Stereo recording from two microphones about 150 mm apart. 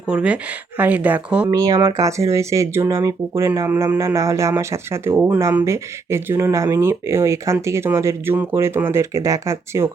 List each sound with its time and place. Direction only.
0.1 s speech: 5° right (ahead or behind)
1.5 s speech: 25° right (ahead or behind)